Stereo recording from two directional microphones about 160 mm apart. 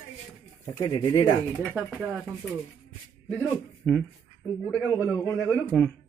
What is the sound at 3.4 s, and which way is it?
Speech, 5° left (ahead or behind).